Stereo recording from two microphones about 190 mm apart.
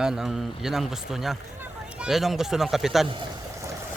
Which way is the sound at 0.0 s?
5° right (ahead or behind).